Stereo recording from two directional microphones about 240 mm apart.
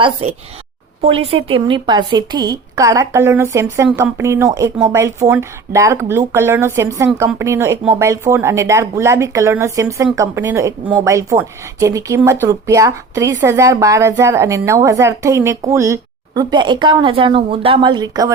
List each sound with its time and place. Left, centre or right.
0.0 s a woman's voice: right